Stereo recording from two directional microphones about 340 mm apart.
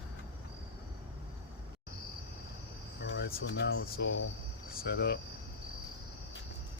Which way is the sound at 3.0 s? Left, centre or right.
Left.